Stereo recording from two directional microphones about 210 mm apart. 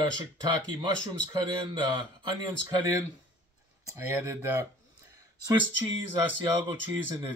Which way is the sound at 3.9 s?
15° right (ahead or behind).